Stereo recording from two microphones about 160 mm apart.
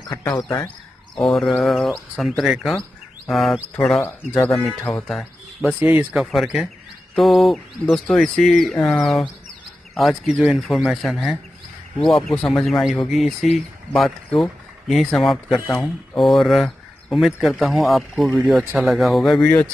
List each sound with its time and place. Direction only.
0.3 s speech: 20° left (ahead or behind)
1.1 s speech: centre (ahead or behind)
5.8 s speech: 10° right (ahead or behind)
6.1 s speech: centre (ahead or behind)